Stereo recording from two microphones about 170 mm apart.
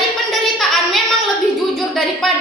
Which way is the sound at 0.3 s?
Centre (ahead or behind).